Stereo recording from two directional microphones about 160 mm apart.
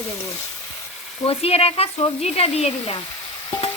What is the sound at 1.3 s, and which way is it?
Stir, 40° left (ahead or behind).